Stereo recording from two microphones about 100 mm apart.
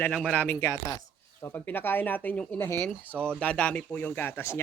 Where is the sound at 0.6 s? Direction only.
25° left (ahead or behind).